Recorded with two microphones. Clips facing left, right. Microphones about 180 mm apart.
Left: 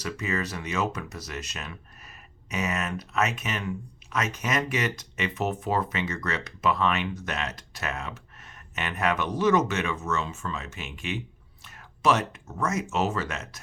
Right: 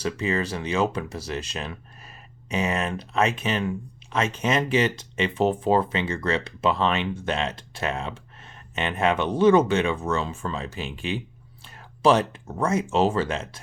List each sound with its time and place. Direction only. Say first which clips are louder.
0.0 s speech: right 5 dB; 30° right (ahead or behind)